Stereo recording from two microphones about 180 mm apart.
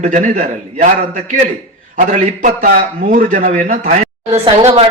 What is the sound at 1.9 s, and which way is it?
A man's voice, 45° right (ahead or behind).